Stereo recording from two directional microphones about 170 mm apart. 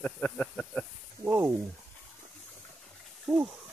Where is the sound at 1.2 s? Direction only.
15° right (ahead or behind).